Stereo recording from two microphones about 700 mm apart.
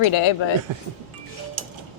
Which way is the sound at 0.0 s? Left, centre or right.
Left.